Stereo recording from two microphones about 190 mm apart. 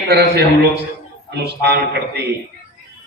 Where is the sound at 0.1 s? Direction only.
60° right (ahead or behind).